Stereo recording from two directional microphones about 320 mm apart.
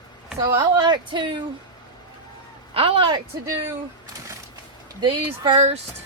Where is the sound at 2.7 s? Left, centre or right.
Centre.